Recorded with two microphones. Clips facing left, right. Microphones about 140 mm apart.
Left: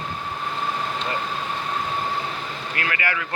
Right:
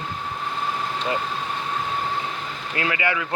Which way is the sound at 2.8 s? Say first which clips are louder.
Right 3 dB; 20° right (ahead or behind).